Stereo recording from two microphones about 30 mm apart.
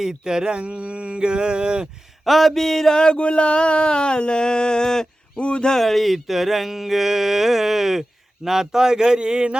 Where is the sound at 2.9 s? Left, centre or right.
Left.